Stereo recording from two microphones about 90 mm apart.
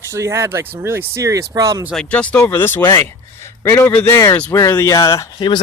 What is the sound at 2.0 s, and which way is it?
Speech, 15° left (ahead or behind).